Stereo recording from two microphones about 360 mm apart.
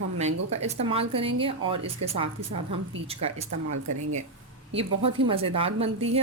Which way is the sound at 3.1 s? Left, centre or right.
Centre.